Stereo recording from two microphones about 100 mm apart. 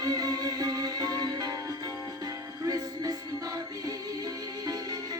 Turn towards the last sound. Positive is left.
turn(degrees=-40)  # may be behind; listen again after turning